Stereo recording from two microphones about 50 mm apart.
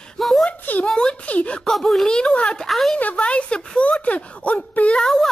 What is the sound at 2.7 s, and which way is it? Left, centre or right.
Speech, centre.